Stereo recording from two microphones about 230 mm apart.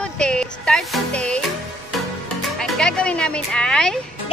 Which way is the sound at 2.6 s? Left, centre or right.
Centre.